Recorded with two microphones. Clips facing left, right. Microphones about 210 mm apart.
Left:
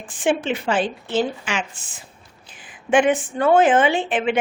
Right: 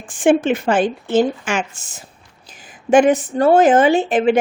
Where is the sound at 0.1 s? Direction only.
50° right (ahead or behind).